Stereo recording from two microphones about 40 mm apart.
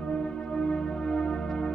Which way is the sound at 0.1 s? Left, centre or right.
Left.